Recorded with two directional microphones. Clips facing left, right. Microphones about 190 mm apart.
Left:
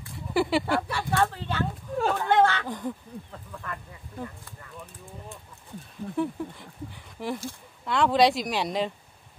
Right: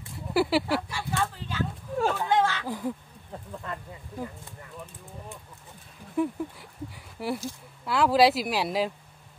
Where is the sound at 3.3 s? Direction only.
25° right (ahead or behind).